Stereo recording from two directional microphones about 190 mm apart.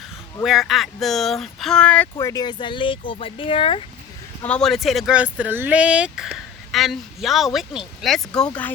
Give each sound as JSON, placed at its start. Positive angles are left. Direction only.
{"t": 0.4, "sound": "speech", "side_deg": 0}
{"t": 4.4, "sound": "speech", "side_deg": 5}